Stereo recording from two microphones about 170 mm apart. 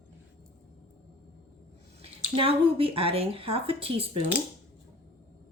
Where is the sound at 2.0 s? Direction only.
35° right (ahead or behind).